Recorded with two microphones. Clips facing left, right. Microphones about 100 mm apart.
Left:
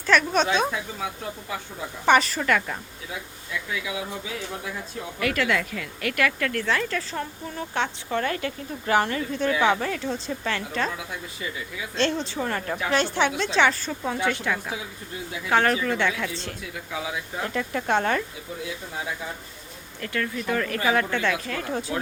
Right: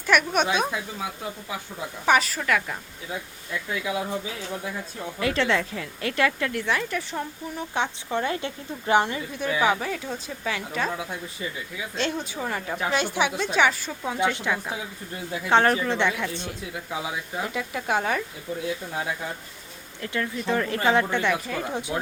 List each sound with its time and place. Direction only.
0.0 s a woman's voice: 10° right (ahead or behind)
2.0 s a woman's voice: centre (ahead or behind)
5.2 s a woman's voice: 25° right (ahead or behind); by 10.9 s 5° right (ahead or behind)
11.9 s a woman's voice: 5° right (ahead or behind)
20.0 s a woman's voice: 20° right (ahead or behind)